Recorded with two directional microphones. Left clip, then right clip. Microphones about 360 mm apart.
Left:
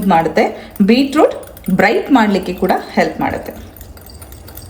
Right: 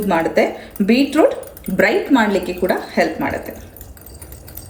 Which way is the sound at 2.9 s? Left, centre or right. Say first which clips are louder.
Left 2 dB; left.